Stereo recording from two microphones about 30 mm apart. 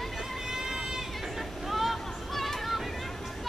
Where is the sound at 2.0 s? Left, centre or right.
Centre.